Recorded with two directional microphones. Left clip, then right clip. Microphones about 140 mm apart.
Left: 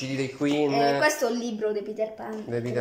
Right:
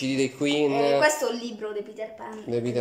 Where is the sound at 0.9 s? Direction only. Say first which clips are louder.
Right 1 dB; 5° right (ahead or behind).